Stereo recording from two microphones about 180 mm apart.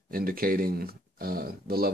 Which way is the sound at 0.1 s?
55° right (ahead or behind).